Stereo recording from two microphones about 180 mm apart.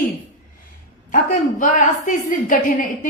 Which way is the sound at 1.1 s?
50° left (ahead or behind).